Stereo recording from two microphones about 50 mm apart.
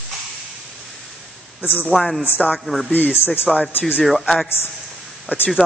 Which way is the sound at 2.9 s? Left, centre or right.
Left.